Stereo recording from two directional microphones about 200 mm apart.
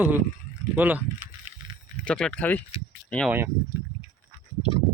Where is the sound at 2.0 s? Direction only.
5° left (ahead or behind).